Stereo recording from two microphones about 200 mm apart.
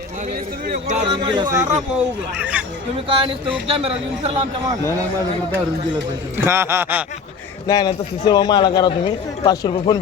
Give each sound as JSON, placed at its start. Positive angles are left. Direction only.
{"t": 0.7, "sound": "a man's voice", "side_deg": -35}
{"t": 1.1, "sound": "speech", "side_deg": -25}
{"t": 3.1, "sound": "a man's voice", "side_deg": -25}
{"t": 6.3, "sound": "speech", "side_deg": -10}
{"t": 7.7, "sound": "a man's voice", "side_deg": 20}